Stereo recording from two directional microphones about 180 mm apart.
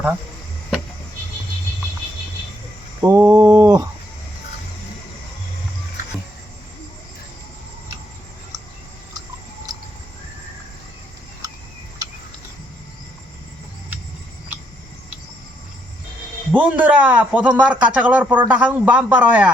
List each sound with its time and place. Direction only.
3.0 s a man's voice: 15° right (ahead or behind)
16.6 s a man's voice: 10° right (ahead or behind)